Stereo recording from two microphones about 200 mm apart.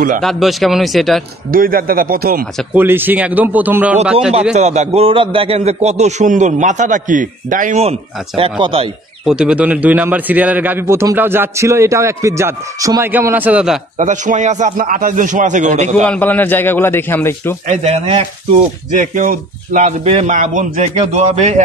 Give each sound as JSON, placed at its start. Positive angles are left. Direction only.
{"t": 0.2, "sound": "speech", "side_deg": 0}
{"t": 1.5, "sound": "speech", "side_deg": -45}
{"t": 2.7, "sound": "a man's voice", "side_deg": -10}
{"t": 4.6, "sound": "a man's voice", "side_deg": -35}
{"t": 9.2, "sound": "a man's voice", "side_deg": -5}
{"t": 13.9, "sound": "a man's voice", "side_deg": -40}
{"t": 16.1, "sound": "a man's voice", "side_deg": 10}
{"t": 17.6, "sound": "a man's voice", "side_deg": -30}
{"t": 18.9, "sound": "a man's voice", "side_deg": -45}